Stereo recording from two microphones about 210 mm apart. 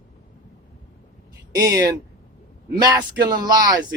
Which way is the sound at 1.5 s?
15° right (ahead or behind).